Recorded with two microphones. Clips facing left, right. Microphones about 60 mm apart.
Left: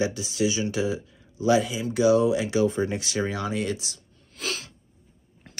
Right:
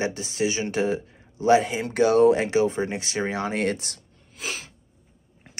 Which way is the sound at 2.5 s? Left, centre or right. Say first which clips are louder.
Right 1 dB; right.